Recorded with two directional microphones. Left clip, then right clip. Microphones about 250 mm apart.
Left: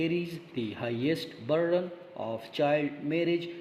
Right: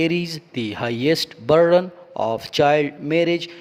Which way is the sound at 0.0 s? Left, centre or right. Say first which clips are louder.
Right 9 dB; right.